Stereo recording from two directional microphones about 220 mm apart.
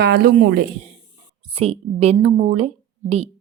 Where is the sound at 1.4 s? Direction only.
25° right (ahead or behind).